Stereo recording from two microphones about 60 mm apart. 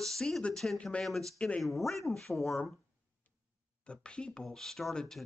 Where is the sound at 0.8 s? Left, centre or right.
Centre.